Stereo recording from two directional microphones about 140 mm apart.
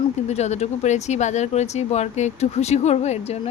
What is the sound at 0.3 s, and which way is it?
Speech, 50° left (ahead or behind).